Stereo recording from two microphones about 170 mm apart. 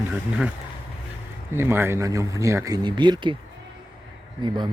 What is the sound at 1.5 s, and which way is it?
Speech, 15° right (ahead or behind).